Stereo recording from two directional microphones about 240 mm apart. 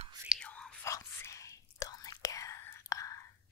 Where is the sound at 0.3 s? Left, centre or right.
Centre.